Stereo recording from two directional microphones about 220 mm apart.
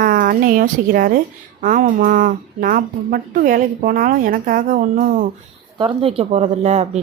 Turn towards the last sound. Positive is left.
turn(degrees=-30)  # may be behind; listen again after turning